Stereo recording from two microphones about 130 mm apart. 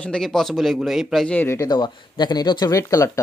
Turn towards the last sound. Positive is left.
turn(degrees=25)  # may be behind; listen again after turning